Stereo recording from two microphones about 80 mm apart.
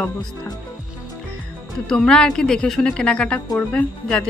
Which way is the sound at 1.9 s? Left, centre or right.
Centre.